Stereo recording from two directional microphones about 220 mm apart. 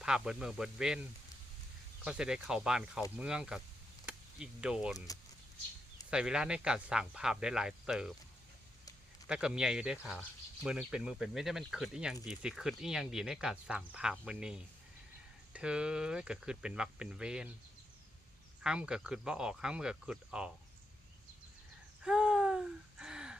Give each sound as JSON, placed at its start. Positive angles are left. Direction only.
{"t": 0.0, "sound": "speech", "side_deg": -5}
{"t": 2.0, "sound": "speech", "side_deg": -5}
{"t": 4.0, "sound": "a sound", "side_deg": -5}
{"t": 6.1, "sound": "speech", "side_deg": -5}
{"t": 9.2, "sound": "speech", "side_deg": -5}
{"t": 18.6, "sound": "speech", "side_deg": -5}
{"t": 22.0, "sound": "a sound", "side_deg": -5}